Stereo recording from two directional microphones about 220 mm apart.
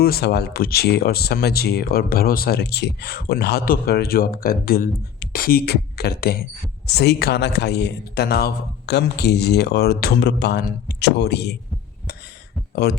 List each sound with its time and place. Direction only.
0.0 s speech: 45° left (ahead or behind)
12.1 s heart sounds: 45° left (ahead or behind)
12.7 s speech: 45° left (ahead or behind)